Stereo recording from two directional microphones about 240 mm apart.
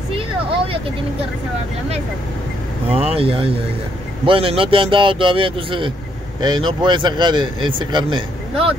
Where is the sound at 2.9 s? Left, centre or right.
Right.